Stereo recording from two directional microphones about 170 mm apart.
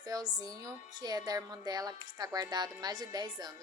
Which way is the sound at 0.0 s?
25° right (ahead or behind).